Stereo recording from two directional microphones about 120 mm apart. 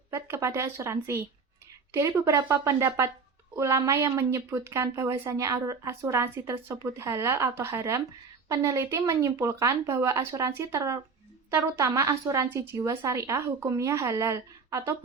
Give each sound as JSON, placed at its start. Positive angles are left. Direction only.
{"t": 0.1, "sound": "a woman's voice", "side_deg": -20}